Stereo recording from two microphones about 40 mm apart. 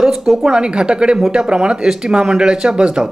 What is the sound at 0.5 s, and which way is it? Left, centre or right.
Speech, right.